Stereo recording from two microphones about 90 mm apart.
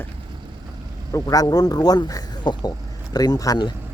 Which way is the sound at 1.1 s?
45° left (ahead or behind).